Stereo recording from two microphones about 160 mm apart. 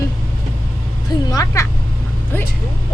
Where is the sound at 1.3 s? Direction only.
20° left (ahead or behind).